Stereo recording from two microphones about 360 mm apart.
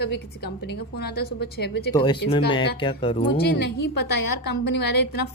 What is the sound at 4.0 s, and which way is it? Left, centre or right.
A woman's voice, left.